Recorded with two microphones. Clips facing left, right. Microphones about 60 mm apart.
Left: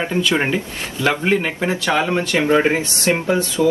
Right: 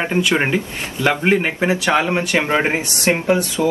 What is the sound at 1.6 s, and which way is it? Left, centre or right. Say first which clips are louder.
Speech: right 3 dB; right.